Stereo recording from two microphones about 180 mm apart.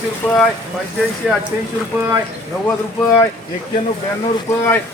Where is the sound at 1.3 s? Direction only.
5° right (ahead or behind).